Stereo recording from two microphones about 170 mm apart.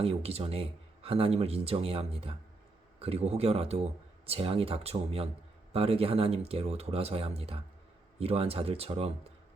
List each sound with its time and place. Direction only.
0.0 s speech: 35° right (ahead or behind)